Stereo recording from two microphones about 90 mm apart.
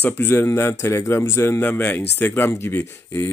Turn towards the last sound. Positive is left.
turn(degrees=25)  # may be behind; listen again after turning